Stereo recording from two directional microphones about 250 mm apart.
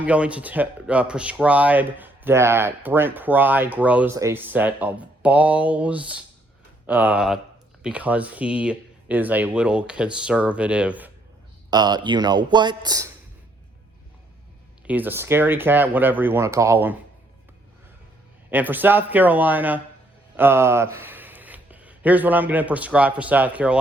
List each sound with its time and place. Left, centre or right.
0.0 s speech: centre
11.7 s speech: centre
14.8 s speech: centre
18.5 s speech: centre